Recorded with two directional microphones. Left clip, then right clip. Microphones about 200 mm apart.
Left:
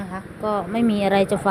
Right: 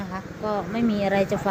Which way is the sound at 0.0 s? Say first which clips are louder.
Left 3 dB; 20° left (ahead or behind).